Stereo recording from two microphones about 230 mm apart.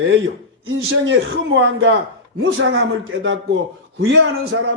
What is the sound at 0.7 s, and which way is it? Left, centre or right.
A man's voice, right.